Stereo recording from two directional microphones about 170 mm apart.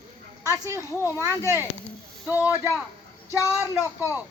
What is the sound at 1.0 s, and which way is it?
Speech, 15° left (ahead or behind).